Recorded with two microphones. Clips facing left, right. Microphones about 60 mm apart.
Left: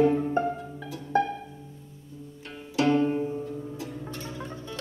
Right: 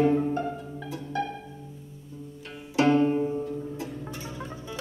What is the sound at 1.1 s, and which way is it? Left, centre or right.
Music, left.